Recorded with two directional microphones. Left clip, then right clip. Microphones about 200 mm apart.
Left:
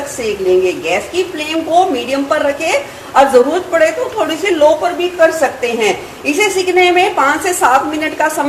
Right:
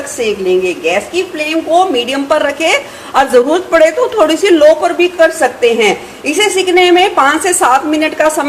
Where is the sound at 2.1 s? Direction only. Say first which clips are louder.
Right 2 dB; 45° right (ahead or behind).